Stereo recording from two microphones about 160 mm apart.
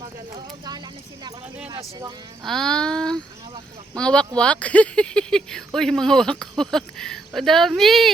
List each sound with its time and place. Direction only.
0.3 s a sound: 25° right (ahead or behind)
1.7 s speech: 25° right (ahead or behind)
2.4 s speech: centre (ahead or behind)